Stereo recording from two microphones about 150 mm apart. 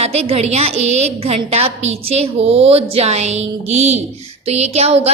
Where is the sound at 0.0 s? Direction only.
45° right (ahead or behind).